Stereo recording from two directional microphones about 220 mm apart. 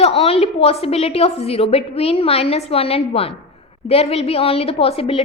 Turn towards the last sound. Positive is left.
turn(degrees=25)  # may be behind; listen again after turning